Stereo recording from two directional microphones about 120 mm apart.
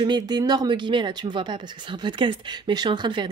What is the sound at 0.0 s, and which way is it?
Speech, 35° right (ahead or behind).